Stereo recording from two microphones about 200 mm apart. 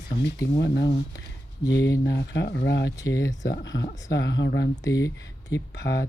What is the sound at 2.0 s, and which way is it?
Speech, 60° left (ahead or behind).